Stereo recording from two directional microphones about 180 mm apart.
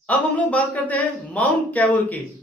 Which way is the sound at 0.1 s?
10° left (ahead or behind).